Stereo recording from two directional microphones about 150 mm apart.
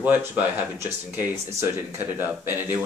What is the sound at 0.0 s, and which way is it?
Speech, 10° right (ahead or behind).